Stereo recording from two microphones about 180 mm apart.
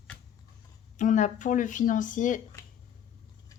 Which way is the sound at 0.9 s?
45° left (ahead or behind).